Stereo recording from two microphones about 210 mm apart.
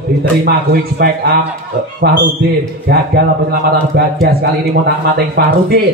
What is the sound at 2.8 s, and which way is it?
A man's voice, 50° right (ahead or behind).